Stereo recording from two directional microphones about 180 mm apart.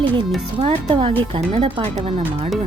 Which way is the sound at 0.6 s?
30° right (ahead or behind).